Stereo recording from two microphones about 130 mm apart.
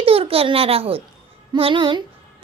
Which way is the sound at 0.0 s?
45° right (ahead or behind).